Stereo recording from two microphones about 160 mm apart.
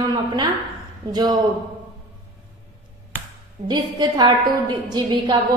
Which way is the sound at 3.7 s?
30° right (ahead or behind).